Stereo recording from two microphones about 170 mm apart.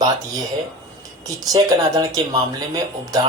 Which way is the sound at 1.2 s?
25° right (ahead or behind).